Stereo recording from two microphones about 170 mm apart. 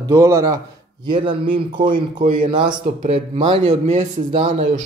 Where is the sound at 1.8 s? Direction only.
55° right (ahead or behind).